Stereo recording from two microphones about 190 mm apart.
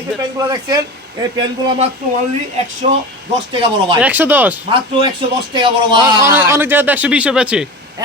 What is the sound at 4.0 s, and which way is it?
Speech, 10° right (ahead or behind).